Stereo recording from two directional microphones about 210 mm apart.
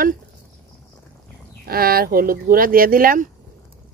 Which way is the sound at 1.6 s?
45° right (ahead or behind).